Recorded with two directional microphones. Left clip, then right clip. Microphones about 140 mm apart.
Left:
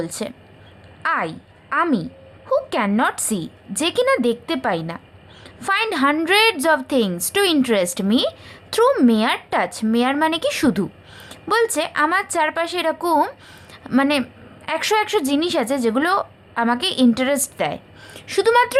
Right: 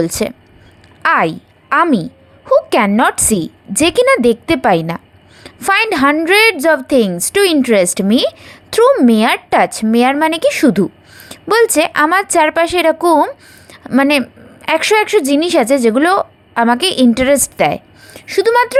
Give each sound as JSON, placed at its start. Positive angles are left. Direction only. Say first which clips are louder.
{"t": 0.0, "sound": "a woman's voice", "louder": "right 11 dB", "side_deg": -40}
{"t": 11.3, "sound": "a woman's voice", "louder": "right 7 dB", "side_deg": -35}
{"t": 13.7, "sound": "a sound", "louder": "right 6 dB", "side_deg": -35}
{"t": 14.8, "sound": "a woman's voice", "louder": "right 6 dB", "side_deg": -30}
{"t": 18.1, "sound": "a woman's voice", "louder": "right 4 dB", "side_deg": -20}